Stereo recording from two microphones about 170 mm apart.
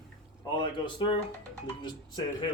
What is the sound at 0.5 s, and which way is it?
Speech, 30° left (ahead or behind).